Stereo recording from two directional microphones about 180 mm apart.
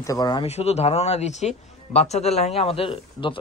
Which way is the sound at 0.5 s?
35° left (ahead or behind).